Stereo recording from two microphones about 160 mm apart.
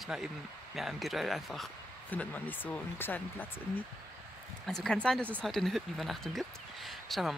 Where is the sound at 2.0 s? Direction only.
10° left (ahead or behind).